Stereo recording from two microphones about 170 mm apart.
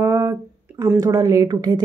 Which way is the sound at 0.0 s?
20° right (ahead or behind).